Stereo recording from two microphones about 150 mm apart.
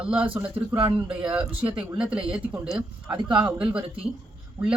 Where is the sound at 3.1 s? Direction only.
30° right (ahead or behind).